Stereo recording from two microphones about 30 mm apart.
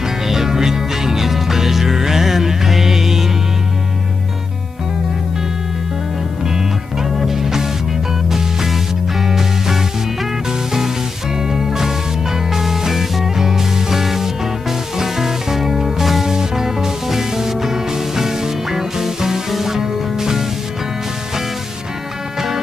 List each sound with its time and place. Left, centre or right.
0.3 s music: centre
7.0 s music: centre
9.2 s music: centre
11.4 s music: centre